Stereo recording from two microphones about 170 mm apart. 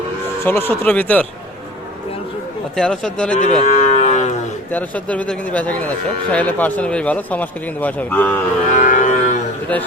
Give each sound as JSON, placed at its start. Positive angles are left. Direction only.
{"t": 0.4, "sound": "a man's voice", "side_deg": 10}
{"t": 2.7, "sound": "speech", "side_deg": 5}
{"t": 3.4, "sound": "livestock", "side_deg": 45}
{"t": 4.7, "sound": "a man's voice", "side_deg": 10}
{"t": 8.7, "sound": "music", "side_deg": 50}